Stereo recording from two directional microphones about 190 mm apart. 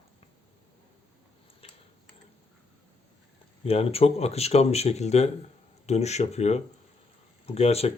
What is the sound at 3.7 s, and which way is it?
Speech, 30° left (ahead or behind).